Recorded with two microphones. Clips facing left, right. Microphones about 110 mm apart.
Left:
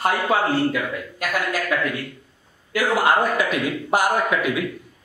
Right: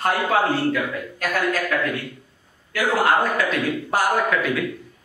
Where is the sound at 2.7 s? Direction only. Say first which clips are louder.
Even; 15° left (ahead or behind).